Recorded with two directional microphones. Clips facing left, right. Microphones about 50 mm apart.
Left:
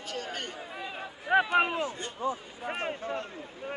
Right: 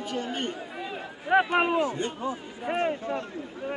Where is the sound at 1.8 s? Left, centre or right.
Right.